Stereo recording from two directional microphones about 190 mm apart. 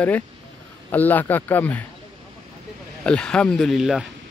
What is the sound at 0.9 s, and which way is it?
Speech, 10° left (ahead or behind).